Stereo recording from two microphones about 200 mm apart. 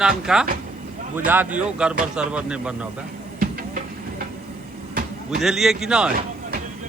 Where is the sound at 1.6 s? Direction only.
5° right (ahead or behind).